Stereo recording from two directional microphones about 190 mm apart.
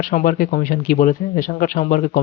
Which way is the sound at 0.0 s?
45° left (ahead or behind).